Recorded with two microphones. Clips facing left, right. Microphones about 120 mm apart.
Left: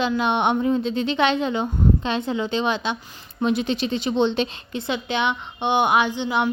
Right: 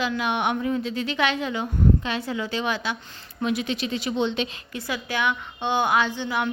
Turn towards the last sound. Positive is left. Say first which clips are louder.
# left 3 dB
turn(degrees=20)  # may be behind; listen again after turning